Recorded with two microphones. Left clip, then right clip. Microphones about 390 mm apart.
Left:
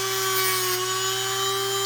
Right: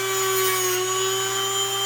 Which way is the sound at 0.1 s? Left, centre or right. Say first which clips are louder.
Right 2 dB; centre.